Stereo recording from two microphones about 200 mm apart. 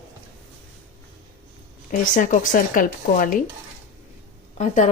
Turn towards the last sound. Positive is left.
turn(degrees=35)  # may be behind; listen again after turning